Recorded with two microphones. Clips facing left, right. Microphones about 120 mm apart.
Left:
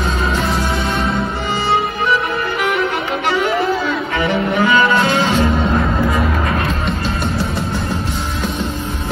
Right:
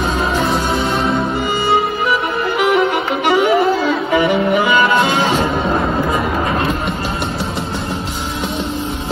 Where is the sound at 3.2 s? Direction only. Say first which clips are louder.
Right 5 dB; 5° right (ahead or behind).